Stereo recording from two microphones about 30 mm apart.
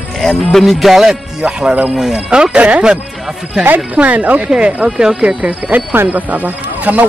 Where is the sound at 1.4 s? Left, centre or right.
Right.